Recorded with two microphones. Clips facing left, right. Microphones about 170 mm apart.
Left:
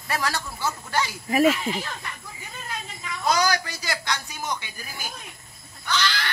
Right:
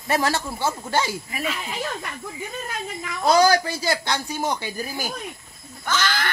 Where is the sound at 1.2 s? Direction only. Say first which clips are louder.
Left 10 dB; 50° left (ahead or behind).